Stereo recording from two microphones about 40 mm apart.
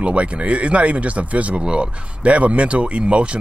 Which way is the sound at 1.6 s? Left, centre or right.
Right.